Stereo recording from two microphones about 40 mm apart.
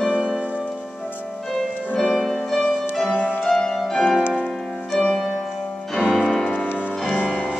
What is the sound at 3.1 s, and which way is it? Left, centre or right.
Music, left.